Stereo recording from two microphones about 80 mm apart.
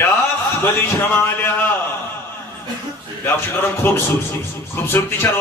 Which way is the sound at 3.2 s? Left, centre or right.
Left.